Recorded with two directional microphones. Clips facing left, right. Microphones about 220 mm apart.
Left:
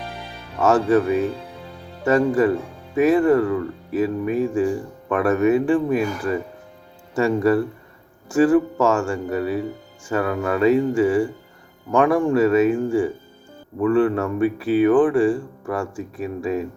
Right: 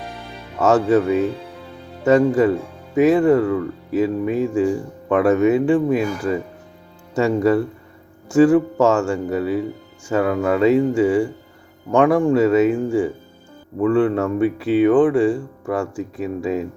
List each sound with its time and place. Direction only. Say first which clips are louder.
0.6 s speech: right 1 dB; 25° right (ahead or behind)
8.8 s speech: right 3 dB; 25° right (ahead or behind)